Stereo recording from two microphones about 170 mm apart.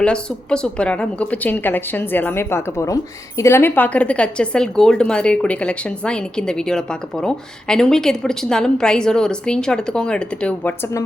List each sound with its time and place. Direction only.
0.0 s a woman's voice: 5° left (ahead or behind)